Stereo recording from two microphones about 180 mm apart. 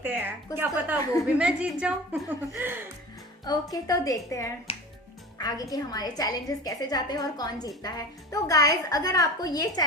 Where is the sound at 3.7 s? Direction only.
20° left (ahead or behind).